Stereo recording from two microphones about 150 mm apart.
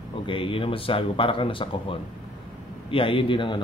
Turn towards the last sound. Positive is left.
turn(degrees=35)  # may be behind; listen again after turning